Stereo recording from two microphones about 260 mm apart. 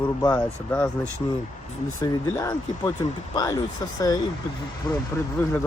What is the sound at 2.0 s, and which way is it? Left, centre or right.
Speech, centre.